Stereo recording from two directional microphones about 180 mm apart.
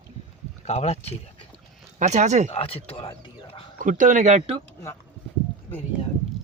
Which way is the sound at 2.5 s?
30° left (ahead or behind).